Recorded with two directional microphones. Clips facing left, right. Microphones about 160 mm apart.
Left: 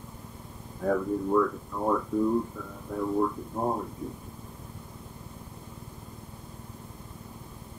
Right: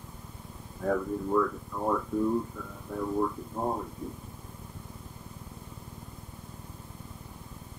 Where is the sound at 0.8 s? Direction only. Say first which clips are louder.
Left 2 dB; 15° left (ahead or behind).